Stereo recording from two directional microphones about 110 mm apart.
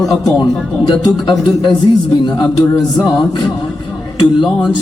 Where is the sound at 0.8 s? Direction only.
50° left (ahead or behind).